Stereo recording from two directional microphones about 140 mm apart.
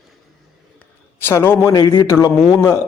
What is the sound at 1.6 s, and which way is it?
A man's voice, 20° left (ahead or behind).